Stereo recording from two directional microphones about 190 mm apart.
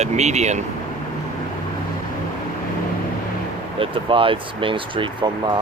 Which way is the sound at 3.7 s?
30° right (ahead or behind).